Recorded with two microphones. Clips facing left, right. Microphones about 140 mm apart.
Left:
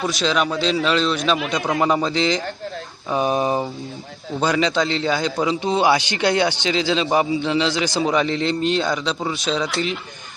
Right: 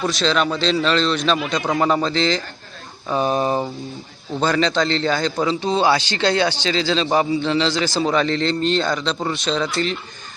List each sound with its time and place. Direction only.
0.2 s a man's voice: 10° left (ahead or behind)
1.9 s a man's voice: 10° left (ahead or behind)